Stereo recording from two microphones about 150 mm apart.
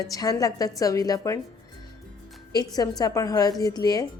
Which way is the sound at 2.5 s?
25° left (ahead or behind).